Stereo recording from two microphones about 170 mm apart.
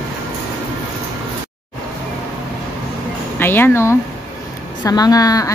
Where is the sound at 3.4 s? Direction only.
10° left (ahead or behind).